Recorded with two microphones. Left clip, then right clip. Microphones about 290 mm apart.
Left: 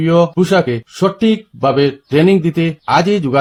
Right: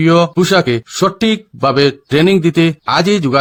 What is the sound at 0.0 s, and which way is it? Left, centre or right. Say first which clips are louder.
Speech: right 1 dB; right.